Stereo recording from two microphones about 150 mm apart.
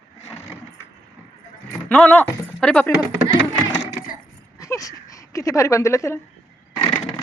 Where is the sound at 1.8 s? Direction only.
10° left (ahead or behind).